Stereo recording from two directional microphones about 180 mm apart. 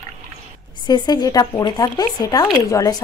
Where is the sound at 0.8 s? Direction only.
25° left (ahead or behind).